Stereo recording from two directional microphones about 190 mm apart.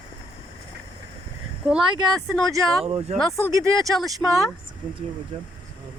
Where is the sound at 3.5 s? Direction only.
15° right (ahead or behind).